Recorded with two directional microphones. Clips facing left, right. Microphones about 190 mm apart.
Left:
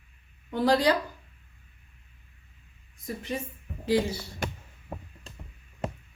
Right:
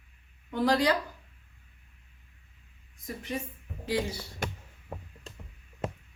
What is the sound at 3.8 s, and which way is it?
Speech, 25° left (ahead or behind).